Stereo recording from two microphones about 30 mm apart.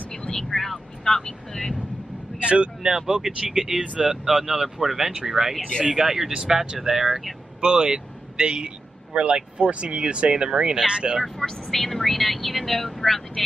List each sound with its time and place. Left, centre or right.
0.5 s vehicle: centre
2.3 s vehicle: right
3.2 s speech: centre
6.3 s a man's voice: right
11.2 s speech: centre